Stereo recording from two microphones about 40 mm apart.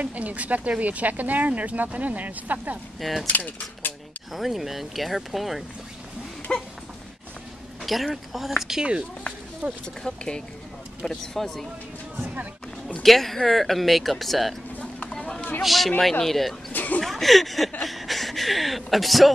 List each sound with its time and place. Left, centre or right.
0.0 s speech: right
3.0 s speech: centre
3.3 s speech: left
4.3 s speech: centre
6.5 s speech: left
7.8 s speech: centre
9.6 s speech: right
10.0 s speech: centre
11.0 s speech: centre
13.0 s speech: centre
15.0 s a sound: centre
15.6 s speech: centre
16.7 s a sound: left
17.0 s a man's voice: centre